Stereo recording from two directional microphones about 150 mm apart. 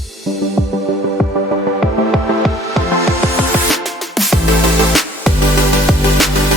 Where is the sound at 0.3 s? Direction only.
Centre (ahead or behind).